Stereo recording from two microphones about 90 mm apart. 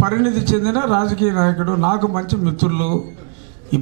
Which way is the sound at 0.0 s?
15° right (ahead or behind).